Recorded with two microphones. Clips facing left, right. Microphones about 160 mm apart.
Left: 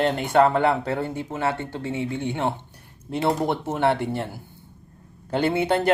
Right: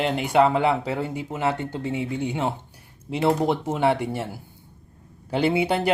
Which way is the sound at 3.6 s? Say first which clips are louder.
Even; 10° right (ahead or behind).